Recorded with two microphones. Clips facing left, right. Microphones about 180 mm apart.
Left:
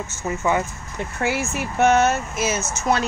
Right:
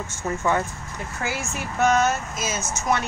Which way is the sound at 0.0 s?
5° left (ahead or behind).